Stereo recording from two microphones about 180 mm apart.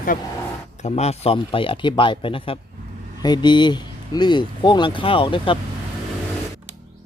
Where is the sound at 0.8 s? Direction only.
40° left (ahead or behind).